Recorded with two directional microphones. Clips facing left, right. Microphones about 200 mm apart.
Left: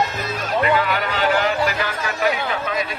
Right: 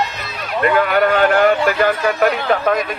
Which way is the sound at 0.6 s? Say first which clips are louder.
Right 8 dB; 50° right (ahead or behind).